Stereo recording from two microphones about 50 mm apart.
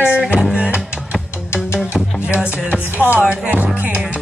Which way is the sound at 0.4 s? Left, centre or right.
Centre.